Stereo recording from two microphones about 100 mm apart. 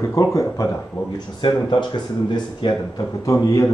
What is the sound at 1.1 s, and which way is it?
Speech, 50° left (ahead or behind).